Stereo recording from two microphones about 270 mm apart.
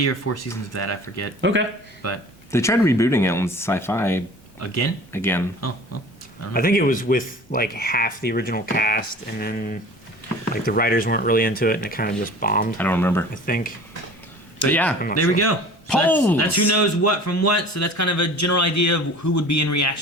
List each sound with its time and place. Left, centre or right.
0.0 s speech: left
1.4 s a man's voice: right
2.0 s speech: left
2.5 s speech: centre
4.6 s speech: left
5.1 s speech: centre
5.5 s speech: left
6.5 s speech: left
12.7 s speech: centre
13.3 s speech: left
14.7 s speech: centre
15.1 s speech: left
16.0 s speech: centre
16.7 s speech: left